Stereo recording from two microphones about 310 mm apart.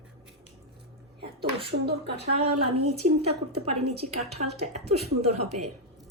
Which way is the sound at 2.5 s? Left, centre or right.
Right.